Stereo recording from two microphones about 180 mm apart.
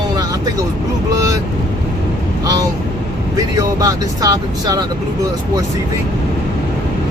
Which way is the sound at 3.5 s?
20° right (ahead or behind).